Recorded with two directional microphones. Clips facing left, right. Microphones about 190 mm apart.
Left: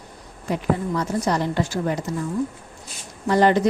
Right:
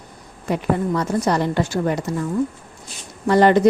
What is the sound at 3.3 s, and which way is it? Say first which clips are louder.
Speech: right 3 dB; 60° right (ahead or behind).